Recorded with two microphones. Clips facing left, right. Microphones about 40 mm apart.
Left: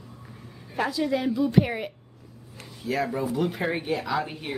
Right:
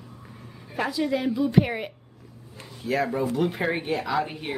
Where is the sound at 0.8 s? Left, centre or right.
Centre.